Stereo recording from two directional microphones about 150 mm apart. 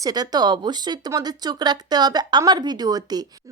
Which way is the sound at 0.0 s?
25° right (ahead or behind).